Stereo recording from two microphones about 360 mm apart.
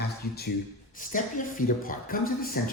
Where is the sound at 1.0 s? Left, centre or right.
Left.